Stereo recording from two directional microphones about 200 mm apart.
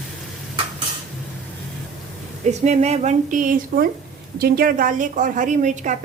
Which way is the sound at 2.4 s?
35° right (ahead or behind).